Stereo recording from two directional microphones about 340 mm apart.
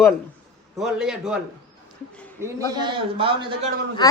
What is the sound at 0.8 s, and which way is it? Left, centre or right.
Speech, centre.